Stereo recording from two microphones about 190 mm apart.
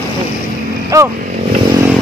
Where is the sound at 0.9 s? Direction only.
15° right (ahead or behind).